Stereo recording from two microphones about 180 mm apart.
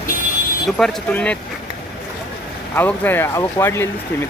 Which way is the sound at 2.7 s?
10° left (ahead or behind).